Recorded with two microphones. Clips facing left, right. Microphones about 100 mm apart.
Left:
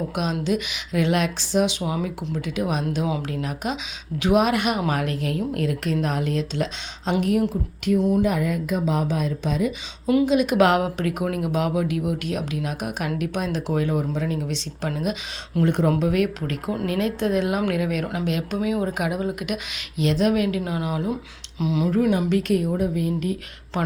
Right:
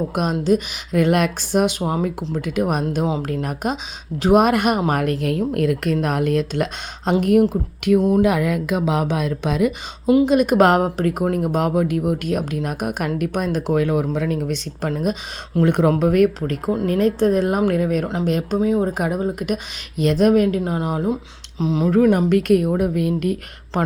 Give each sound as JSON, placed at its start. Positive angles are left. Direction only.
{"t": 0.1, "sound": "a woman's voice", "side_deg": -45}
{"t": 8.2, "sound": "speech", "side_deg": -80}
{"t": 10.2, "sound": "speech", "side_deg": -50}
{"t": 15.6, "sound": "a woman's voice", "side_deg": -60}
{"t": 16.0, "sound": "speech", "side_deg": -50}
{"t": 22.0, "sound": "a woman's voice", "side_deg": -45}